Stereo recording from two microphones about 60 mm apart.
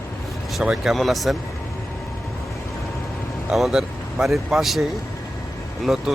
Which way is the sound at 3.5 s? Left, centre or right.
Centre.